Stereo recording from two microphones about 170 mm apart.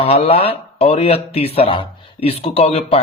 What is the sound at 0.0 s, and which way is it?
Speech, 35° left (ahead or behind).